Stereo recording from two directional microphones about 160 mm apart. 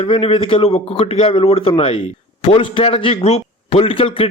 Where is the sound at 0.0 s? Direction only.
35° left (ahead or behind).